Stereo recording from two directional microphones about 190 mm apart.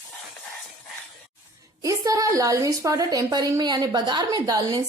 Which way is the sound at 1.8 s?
20° right (ahead or behind).